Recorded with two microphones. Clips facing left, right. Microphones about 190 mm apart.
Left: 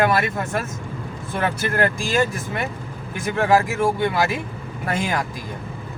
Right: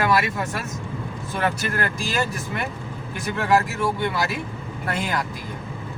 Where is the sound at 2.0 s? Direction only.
45° left (ahead or behind).